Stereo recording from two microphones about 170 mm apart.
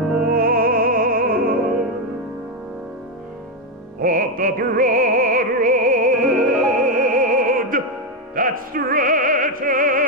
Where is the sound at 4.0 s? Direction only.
55° right (ahead or behind).